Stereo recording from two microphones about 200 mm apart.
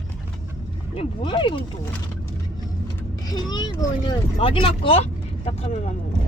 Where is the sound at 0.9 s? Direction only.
25° left (ahead or behind).